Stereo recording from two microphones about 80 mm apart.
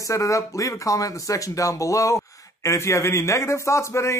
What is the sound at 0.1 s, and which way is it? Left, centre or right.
Speech, left.